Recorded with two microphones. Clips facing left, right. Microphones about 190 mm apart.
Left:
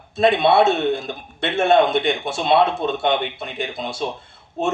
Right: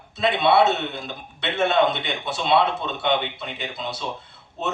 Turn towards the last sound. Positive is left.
turn(degrees=50)  # may be behind; listen again after turning